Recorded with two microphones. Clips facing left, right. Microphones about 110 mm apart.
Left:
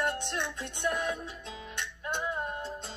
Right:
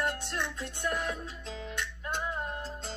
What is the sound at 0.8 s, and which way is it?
Music, centre (ahead or behind).